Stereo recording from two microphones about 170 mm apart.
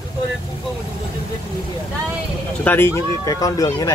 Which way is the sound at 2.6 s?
10° left (ahead or behind).